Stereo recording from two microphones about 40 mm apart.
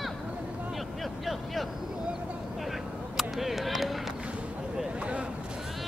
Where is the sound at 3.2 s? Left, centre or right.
Centre.